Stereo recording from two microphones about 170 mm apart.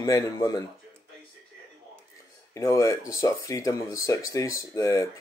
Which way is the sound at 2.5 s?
20° left (ahead or behind).